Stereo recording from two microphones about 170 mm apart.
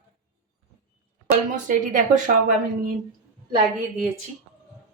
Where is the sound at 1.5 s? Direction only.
50° right (ahead or behind).